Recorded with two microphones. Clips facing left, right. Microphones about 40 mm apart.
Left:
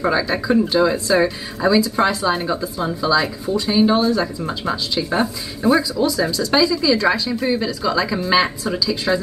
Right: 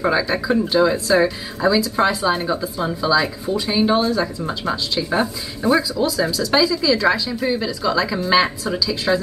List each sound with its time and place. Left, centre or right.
0.0 s speech: centre